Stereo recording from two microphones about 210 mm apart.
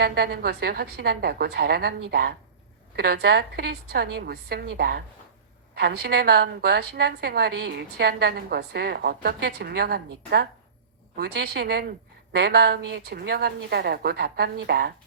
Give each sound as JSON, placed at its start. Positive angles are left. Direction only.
{"t": 0.0, "sound": "a woman's voice", "side_deg": -50}